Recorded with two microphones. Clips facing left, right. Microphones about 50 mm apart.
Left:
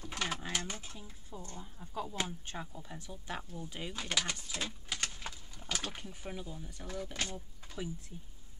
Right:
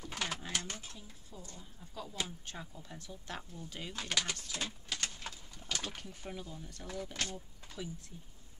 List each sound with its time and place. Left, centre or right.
0.0 s mechanisms: centre
0.4 s a sound: centre
0.9 s speech: left; by 7.7 s centre